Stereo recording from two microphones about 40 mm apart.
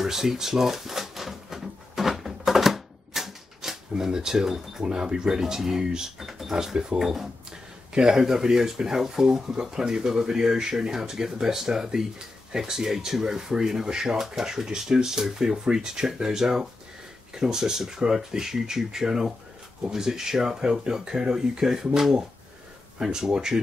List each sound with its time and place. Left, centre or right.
0.0 s typewriter: centre
3.9 s speech: centre
7.9 s speech: centre